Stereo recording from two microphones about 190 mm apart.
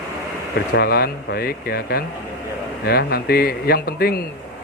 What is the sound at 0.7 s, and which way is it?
Speech, 55° left (ahead or behind).